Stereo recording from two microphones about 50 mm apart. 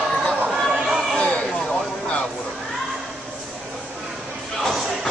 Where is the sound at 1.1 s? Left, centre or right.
Centre.